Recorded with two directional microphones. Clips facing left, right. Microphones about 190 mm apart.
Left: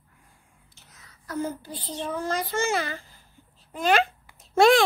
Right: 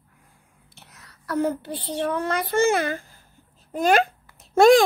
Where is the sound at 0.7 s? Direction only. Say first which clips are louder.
Right 6 dB; 65° right (ahead or behind).